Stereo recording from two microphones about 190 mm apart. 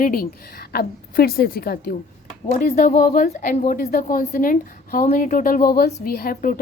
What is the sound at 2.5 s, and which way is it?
A woman's voice, 40° left (ahead or behind).